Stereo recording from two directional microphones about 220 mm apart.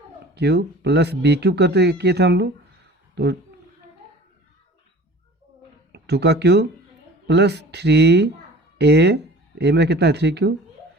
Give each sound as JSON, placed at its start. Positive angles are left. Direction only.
{"t": 0.3, "sound": "speech", "side_deg": -50}
{"t": 5.9, "sound": "speech", "side_deg": -50}